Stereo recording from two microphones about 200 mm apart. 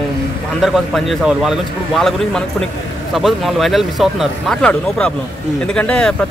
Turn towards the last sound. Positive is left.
turn(degrees=5)  # may be behind; listen again after turning